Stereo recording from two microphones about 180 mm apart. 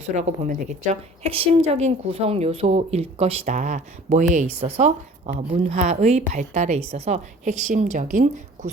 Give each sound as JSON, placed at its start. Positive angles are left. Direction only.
{"t": 0.2, "sound": "a woman's voice", "side_deg": -40}